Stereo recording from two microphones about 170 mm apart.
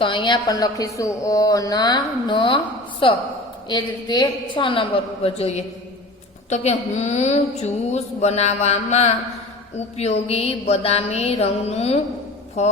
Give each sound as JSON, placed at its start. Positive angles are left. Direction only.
{"t": 0.0, "sound": "a woman's voice", "side_deg": 30}
{"t": 3.7, "sound": "a woman's voice", "side_deg": 25}
{"t": 6.5, "sound": "mantra", "side_deg": 40}